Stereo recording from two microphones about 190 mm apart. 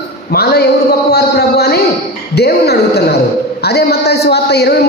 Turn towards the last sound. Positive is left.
turn(degrees=60)  # may be behind; listen again after turning